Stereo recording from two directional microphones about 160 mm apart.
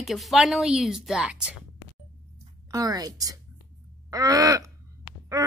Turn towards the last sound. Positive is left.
turn(degrees=-25)  # may be behind; listen again after turning